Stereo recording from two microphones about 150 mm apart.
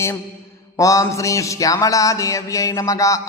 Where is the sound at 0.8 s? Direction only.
20° left (ahead or behind).